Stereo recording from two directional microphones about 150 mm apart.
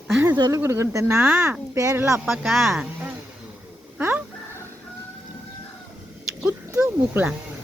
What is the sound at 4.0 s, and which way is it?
Chicken, 15° right (ahead or behind).